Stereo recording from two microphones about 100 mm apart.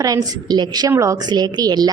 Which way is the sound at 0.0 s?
40° right (ahead or behind).